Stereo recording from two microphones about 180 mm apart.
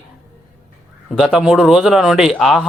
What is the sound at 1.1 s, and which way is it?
A man's voice, centre (ahead or behind).